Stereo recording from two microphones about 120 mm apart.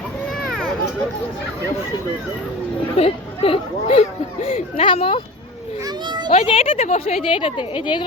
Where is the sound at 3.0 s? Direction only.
55° left (ahead or behind).